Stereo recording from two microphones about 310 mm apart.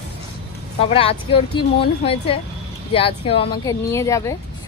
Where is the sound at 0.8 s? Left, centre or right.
Centre.